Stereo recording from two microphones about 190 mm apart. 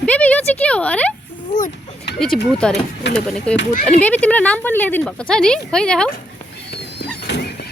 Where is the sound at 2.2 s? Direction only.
5° left (ahead or behind).